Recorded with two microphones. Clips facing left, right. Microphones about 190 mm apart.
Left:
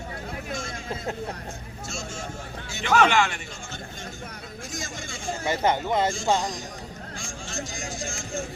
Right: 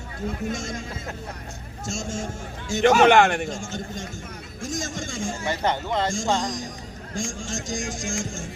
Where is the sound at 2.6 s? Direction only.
45° right (ahead or behind).